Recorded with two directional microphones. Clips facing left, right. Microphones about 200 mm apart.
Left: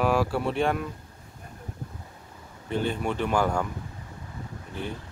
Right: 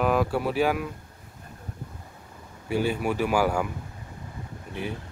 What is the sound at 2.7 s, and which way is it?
Speech, 10° right (ahead or behind).